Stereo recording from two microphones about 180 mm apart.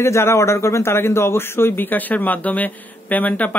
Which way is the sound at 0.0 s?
15° left (ahead or behind).